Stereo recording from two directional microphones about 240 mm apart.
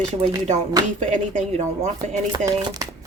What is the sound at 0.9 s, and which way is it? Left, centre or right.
Speech, right.